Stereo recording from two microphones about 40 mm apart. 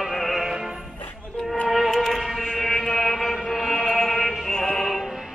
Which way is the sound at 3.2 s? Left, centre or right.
Centre.